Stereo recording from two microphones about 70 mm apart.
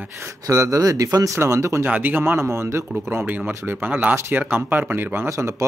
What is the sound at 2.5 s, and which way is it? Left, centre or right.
Speech, right.